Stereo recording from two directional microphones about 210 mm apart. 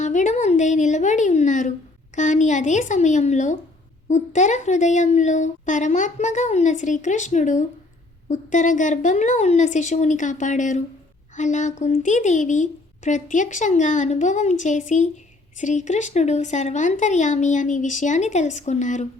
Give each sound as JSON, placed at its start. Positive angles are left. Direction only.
{"t": 0.0, "sound": "a woman's voice", "side_deg": 35}